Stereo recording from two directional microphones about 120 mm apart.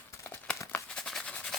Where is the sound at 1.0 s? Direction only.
5° left (ahead or behind).